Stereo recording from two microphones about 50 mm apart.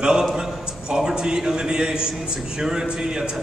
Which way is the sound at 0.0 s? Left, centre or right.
Centre.